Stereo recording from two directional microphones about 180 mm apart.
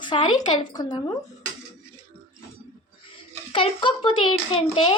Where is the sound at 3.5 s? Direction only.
30° left (ahead or behind).